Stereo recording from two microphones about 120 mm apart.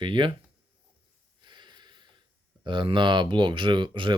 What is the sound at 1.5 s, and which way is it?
Snort, 40° right (ahead or behind).